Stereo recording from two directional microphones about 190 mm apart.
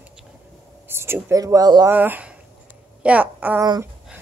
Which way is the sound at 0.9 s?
10° right (ahead or behind).